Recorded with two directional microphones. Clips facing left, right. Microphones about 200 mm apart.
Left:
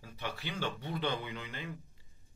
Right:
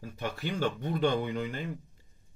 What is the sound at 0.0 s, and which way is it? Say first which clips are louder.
Speech: right 6 dB; 50° right (ahead or behind).